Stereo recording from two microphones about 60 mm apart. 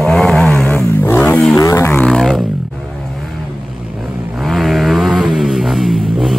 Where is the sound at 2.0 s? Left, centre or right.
Centre.